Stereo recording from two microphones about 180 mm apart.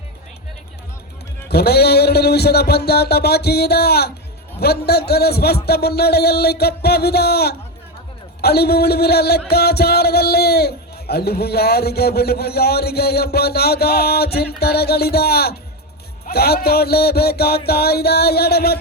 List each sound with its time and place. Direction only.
1.5 s speech: 60° left (ahead or behind)